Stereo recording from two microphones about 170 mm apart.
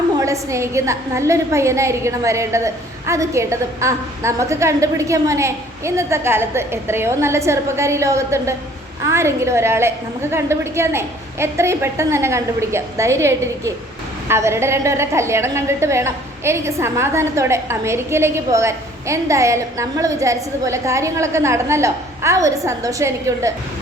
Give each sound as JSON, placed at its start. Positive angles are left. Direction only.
{"t": 0.2, "sound": "a woman's voice", "side_deg": -15}